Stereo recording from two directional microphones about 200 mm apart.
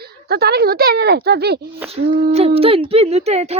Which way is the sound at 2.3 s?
30° right (ahead or behind).